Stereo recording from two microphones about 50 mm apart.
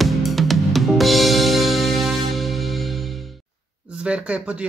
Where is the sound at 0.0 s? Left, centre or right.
Centre.